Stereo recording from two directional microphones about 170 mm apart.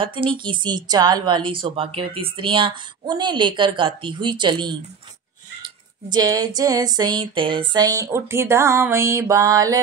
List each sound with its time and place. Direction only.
0.0 s speech: 30° right (ahead or behind)
6.0 s speech: 25° right (ahead or behind)